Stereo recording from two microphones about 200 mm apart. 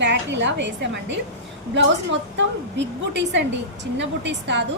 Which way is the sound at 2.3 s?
60° right (ahead or behind).